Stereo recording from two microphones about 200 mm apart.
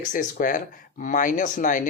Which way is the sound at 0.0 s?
40° left (ahead or behind).